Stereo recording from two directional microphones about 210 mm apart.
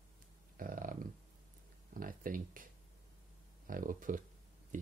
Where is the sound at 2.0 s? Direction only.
40° right (ahead or behind).